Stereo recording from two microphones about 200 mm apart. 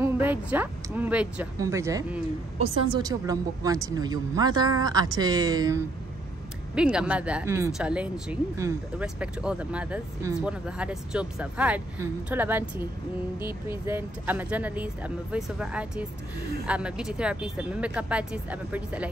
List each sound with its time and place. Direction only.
0.0 s a woman's voice: 10° right (ahead or behind)
6.7 s speech: 5° right (ahead or behind)